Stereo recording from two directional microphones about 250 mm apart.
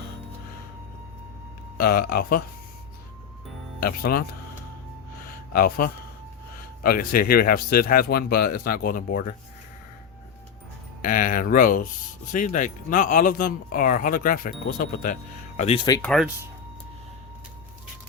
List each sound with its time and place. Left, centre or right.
1.8 s speech: left
3.8 s speech: left
5.5 s speech: left
11.0 s speech: left
16.0 s speech: centre